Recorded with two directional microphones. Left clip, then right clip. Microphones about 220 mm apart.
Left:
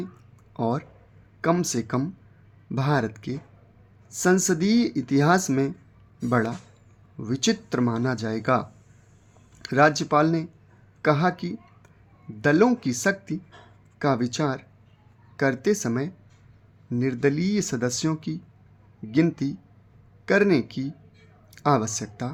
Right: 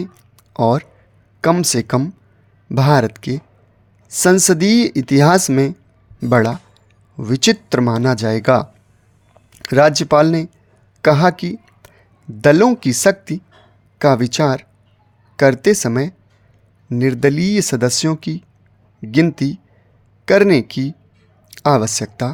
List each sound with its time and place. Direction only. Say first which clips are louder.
0.5 s a woman's voice: right 12 dB; 45° right (ahead or behind)